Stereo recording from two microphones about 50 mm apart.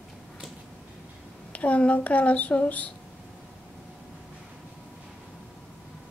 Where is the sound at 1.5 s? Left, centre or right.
Left.